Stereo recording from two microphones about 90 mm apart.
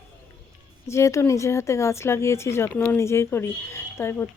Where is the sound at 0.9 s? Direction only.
35° left (ahead or behind).